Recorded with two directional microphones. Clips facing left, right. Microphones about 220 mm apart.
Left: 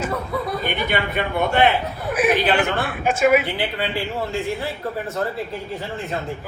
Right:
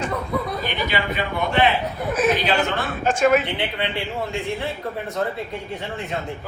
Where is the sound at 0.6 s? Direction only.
55° left (ahead or behind).